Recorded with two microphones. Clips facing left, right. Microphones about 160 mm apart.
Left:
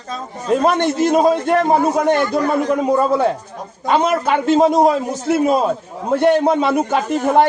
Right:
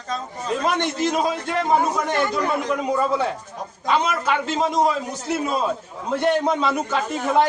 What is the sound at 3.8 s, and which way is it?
A man's voice, 50° left (ahead or behind).